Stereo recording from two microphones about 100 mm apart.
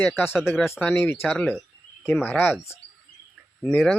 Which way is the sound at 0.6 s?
20° left (ahead or behind).